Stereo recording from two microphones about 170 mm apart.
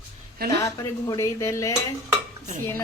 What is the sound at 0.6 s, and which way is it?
Speech, 20° left (ahead or behind).